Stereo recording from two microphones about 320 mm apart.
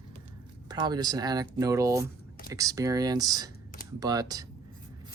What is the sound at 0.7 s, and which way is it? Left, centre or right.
Speech, centre.